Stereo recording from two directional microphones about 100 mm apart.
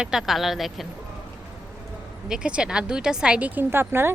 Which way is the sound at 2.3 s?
10° right (ahead or behind).